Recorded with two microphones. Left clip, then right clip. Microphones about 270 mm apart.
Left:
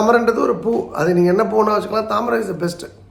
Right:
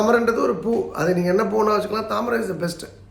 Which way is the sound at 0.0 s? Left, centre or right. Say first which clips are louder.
Left 3 dB; centre.